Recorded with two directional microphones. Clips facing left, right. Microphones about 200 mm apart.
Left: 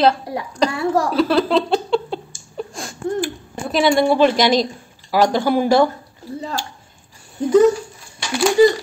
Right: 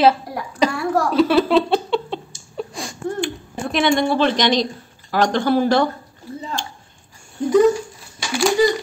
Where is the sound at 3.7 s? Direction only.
5° left (ahead or behind).